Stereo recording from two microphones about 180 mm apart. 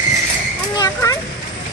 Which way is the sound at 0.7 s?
20° left (ahead or behind).